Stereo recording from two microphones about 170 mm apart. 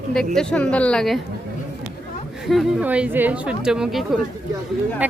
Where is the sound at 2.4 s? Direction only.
5° right (ahead or behind).